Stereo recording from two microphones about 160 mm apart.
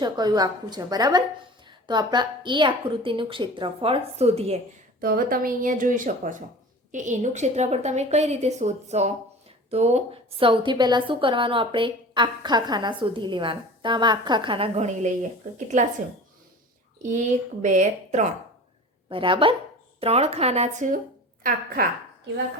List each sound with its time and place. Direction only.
0.0 s a woman's voice: 25° right (ahead or behind); by 4.6 s 40° right (ahead or behind)
4.9 s a woman's voice: 65° right (ahead or behind); by 15.1 s 45° right (ahead or behind)
17.1 s a woman's voice: 50° right (ahead or behind)
19.0 s a woman's voice: 35° right (ahead or behind); by 21.0 s 50° right (ahead or behind)
21.4 s a woman's voice: 70° right (ahead or behind)